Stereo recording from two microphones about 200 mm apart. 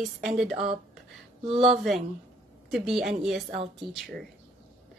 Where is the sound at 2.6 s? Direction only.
Centre (ahead or behind).